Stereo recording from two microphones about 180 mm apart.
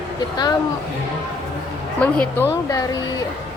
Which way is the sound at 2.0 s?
10° left (ahead or behind).